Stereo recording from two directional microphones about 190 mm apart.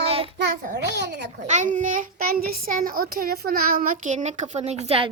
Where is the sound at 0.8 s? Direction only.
65° right (ahead or behind).